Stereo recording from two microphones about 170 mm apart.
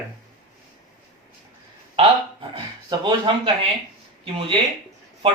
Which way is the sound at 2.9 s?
25° right (ahead or behind).